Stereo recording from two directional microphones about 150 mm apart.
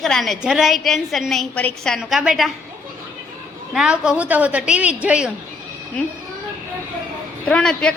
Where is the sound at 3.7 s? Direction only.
5° right (ahead or behind).